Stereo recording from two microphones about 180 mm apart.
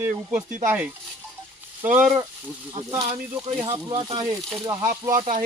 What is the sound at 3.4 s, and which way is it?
Speech, 30° right (ahead or behind).